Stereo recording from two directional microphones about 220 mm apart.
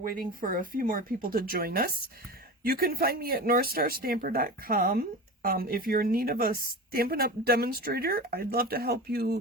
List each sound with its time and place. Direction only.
0.4 s a woman's voice: 40° right (ahead or behind)